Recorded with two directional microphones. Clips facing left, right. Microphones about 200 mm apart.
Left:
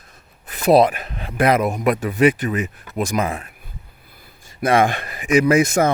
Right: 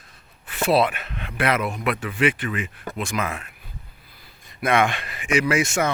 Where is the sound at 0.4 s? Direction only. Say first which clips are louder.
Left 6 dB; 40° left (ahead or behind).